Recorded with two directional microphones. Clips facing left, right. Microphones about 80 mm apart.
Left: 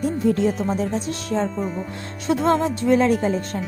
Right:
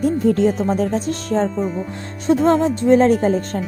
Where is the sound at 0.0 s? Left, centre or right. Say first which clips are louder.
Right 4 dB; right.